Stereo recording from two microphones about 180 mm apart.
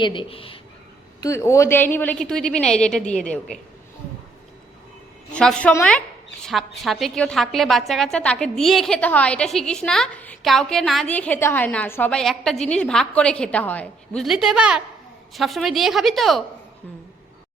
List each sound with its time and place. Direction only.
0.0 s speech: 25° left (ahead or behind)
1.2 s a woman's voice: 15° left (ahead or behind)
5.3 s a woman's voice: 5° left (ahead or behind)